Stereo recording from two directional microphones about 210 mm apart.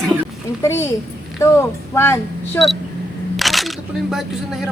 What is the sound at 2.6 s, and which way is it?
Speech, 10° left (ahead or behind).